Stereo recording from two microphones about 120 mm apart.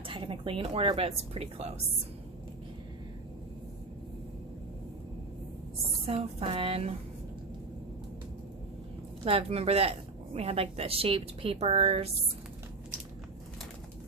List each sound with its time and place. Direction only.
0.1 s a woman's voice: 45° right (ahead or behind)
6.1 s speech: 50° right (ahead or behind)
9.2 s a woman's voice: 55° right (ahead or behind)